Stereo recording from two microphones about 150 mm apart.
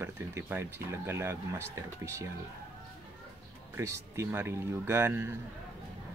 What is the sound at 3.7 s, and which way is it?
Speech, 20° right (ahead or behind).